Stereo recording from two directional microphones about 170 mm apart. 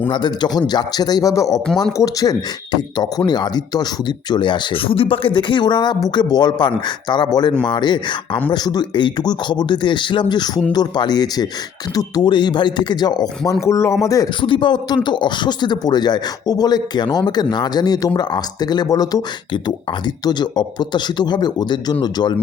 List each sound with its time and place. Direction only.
0.1 s speech: 25° left (ahead or behind)